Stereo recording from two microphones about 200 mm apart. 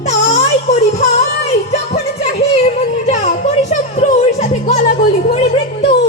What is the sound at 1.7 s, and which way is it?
Music, 35° left (ahead or behind).